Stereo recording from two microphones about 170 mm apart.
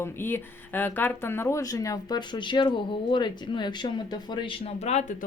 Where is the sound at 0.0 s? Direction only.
15° left (ahead or behind).